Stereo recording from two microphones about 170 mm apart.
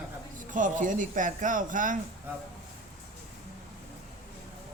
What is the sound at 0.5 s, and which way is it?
Speech, 50° right (ahead or behind).